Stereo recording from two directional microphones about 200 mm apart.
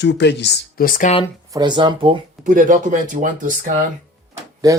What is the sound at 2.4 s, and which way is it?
Speech, 40° right (ahead or behind).